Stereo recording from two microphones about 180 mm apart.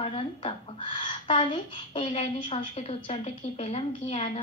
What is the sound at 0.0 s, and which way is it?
A woman's voice, 30° left (ahead or behind).